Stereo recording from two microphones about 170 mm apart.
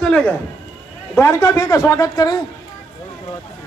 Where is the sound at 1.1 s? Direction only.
20° left (ahead or behind).